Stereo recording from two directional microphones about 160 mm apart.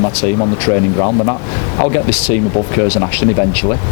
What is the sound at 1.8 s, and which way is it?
Speech, 15° left (ahead or behind).